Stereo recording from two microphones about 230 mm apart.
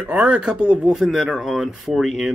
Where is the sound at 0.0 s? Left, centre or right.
Centre.